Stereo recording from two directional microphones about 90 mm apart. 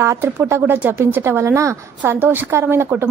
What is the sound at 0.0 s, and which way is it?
A woman's voice, 30° right (ahead or behind).